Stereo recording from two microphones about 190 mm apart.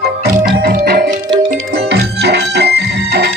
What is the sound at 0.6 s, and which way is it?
Music, 50° right (ahead or behind).